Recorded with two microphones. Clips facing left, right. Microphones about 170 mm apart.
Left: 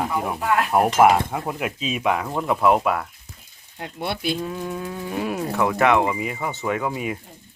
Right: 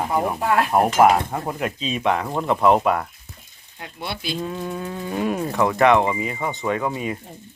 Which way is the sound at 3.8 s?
50° left (ahead or behind).